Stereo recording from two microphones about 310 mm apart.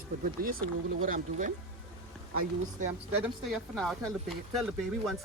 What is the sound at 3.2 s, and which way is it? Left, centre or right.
Speech, centre.